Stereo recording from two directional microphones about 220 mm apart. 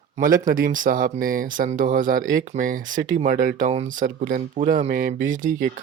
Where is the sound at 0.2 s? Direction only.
40° right (ahead or behind).